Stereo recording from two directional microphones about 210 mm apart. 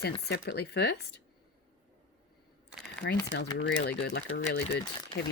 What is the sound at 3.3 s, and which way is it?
Speech, 60° left (ahead or behind).